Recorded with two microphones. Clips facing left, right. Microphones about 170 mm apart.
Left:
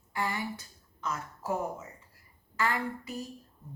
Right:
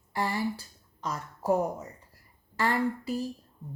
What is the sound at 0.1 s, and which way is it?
Speech, 35° right (ahead or behind).